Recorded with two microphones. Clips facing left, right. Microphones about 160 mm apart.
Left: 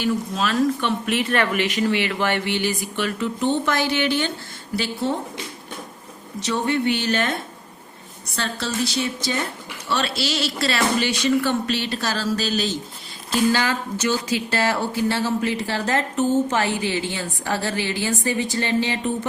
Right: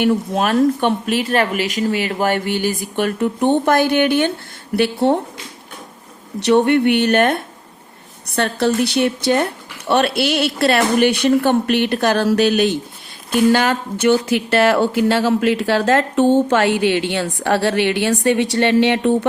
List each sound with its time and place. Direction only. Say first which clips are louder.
0.0 s speech: right 6 dB; 60° right (ahead or behind)
6.4 s speech: right 9 dB; 65° right (ahead or behind)